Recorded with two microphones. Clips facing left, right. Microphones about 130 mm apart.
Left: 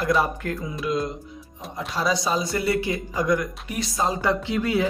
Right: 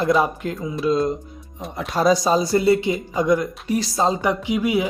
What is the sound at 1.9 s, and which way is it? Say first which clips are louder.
Speech: right 7 dB; 45° right (ahead or behind).